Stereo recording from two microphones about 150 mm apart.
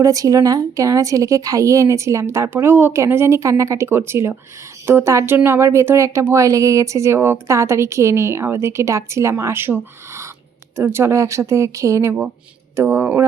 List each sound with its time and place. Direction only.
0.0 s speech: 20° right (ahead or behind)